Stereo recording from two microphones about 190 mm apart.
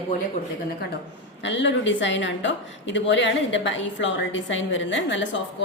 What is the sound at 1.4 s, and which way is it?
A woman's voice, 70° left (ahead or behind).